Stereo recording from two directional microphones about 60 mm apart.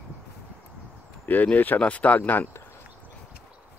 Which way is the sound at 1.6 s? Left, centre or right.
Left.